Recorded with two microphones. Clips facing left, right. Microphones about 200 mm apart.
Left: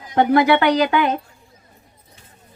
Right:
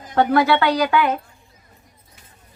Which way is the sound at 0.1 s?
15° left (ahead or behind).